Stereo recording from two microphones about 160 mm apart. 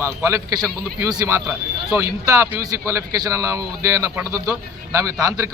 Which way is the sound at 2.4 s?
15° right (ahead or behind).